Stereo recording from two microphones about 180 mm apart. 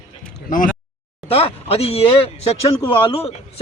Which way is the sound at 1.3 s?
35° left (ahead or behind).